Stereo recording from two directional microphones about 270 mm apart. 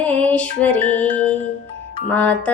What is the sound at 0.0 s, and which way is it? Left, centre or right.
Music, centre.